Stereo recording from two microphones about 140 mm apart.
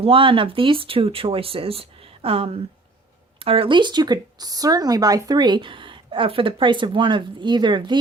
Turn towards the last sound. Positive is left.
turn(degrees=-35)  # may be behind; listen again after turning